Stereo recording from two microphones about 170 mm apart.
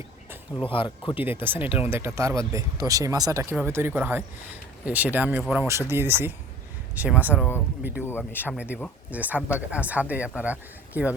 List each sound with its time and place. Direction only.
0.6 s speech: 30° left (ahead or behind)
1.1 s speech: 10° right (ahead or behind)
8.0 s speech: 10° left (ahead or behind)
8.5 s speech: 10° right (ahead or behind)